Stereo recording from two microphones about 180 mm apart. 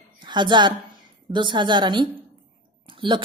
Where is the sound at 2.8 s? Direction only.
30° right (ahead or behind).